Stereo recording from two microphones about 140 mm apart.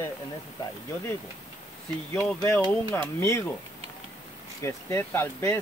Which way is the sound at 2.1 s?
10° left (ahead or behind).